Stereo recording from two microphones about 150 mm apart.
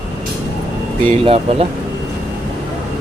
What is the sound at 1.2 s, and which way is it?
Speech, 40° right (ahead or behind).